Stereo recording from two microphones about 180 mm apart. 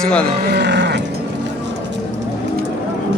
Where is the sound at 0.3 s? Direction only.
60° right (ahead or behind).